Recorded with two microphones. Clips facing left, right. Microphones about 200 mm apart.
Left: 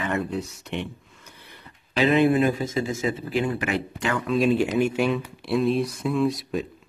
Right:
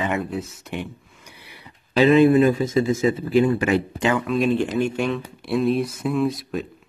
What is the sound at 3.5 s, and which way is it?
Speech, 20° right (ahead or behind).